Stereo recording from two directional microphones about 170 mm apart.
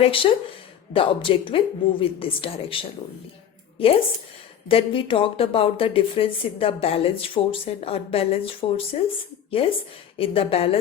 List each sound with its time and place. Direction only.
0.0 s a woman's voice: 30° left (ahead or behind)
4.7 s a woman's voice: 30° left (ahead or behind)